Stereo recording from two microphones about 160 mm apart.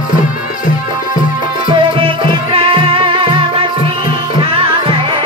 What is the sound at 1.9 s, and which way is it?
Music, 35° right (ahead or behind).